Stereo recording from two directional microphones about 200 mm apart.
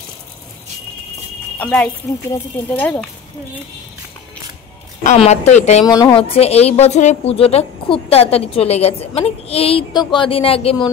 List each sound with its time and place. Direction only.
1.6 s speech: 5° left (ahead or behind)
5.0 s speech: 35° left (ahead or behind)
5.9 s speech: 20° left (ahead or behind)